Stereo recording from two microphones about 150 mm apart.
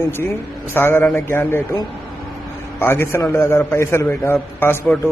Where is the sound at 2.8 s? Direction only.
15° left (ahead or behind).